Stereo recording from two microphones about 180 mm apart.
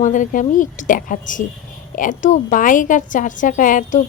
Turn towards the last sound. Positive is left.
turn(degrees=45)  # may be behind; listen again after turning